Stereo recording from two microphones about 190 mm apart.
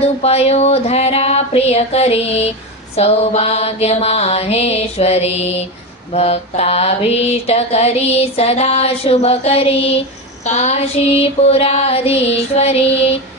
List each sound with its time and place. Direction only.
0.0 s child singing: 35° left (ahead or behind)